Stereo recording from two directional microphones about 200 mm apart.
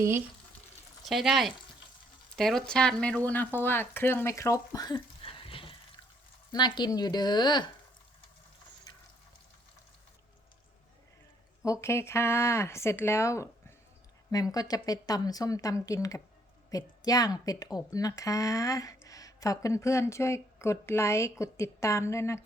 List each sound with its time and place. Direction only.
1.0 s a woman's voice: centre (ahead or behind); by 7.7 s 20° left (ahead or behind)
11.6 s speech: 15° left (ahead or behind)